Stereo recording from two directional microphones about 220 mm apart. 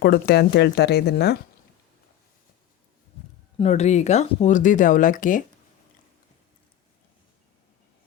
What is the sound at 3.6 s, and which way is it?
Speech, 30° left (ahead or behind).